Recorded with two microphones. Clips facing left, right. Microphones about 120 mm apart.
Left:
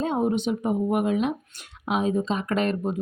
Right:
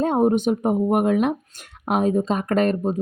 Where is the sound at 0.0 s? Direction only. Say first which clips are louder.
Right 5 dB; 50° right (ahead or behind).